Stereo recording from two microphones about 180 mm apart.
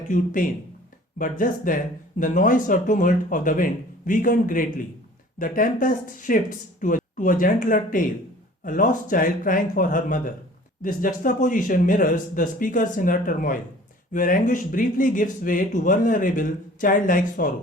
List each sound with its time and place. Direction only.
0.1 s speech: 50° left (ahead or behind)